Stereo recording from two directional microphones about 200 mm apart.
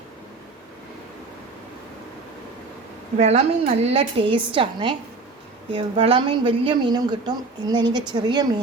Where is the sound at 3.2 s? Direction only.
30° right (ahead or behind).